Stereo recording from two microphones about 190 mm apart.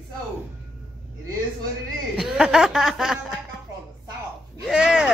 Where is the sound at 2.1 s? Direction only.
5° right (ahead or behind).